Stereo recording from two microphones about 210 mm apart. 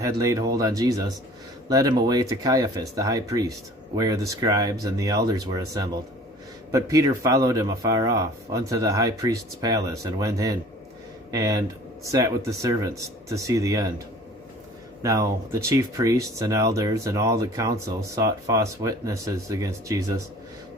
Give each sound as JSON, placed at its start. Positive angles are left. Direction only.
{"t": 0.0, "sound": "speech", "side_deg": -15}
{"t": 15.0, "sound": "speech", "side_deg": -15}